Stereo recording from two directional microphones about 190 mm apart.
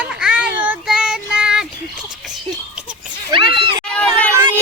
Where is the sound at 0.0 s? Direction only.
5° right (ahead or behind).